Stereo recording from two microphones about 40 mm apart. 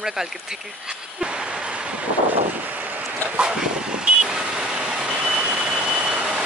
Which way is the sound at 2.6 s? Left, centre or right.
Right.